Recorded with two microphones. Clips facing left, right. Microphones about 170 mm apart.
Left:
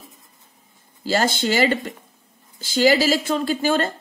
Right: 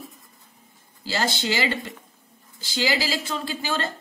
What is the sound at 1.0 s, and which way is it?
A woman's voice, 50° left (ahead or behind).